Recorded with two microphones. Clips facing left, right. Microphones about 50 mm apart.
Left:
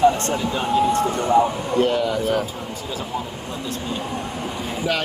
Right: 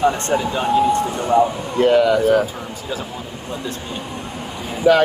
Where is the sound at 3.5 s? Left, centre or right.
Centre.